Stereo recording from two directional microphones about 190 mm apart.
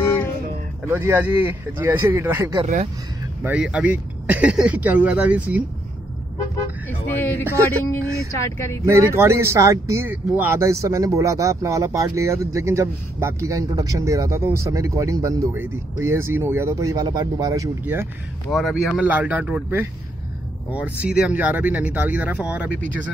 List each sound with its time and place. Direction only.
0.8 s speech: 10° right (ahead or behind)
2.6 s speech: 40° right (ahead or behind)
3.4 s speech: 5° right (ahead or behind)
7.2 s speech: 10° left (ahead or behind)
8.8 s speech: 15° right (ahead or behind)
18.5 s speech: centre (ahead or behind)